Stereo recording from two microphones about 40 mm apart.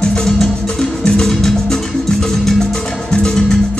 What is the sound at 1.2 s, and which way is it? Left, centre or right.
Music, centre.